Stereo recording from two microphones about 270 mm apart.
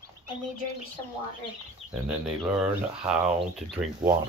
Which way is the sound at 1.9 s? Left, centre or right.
Centre.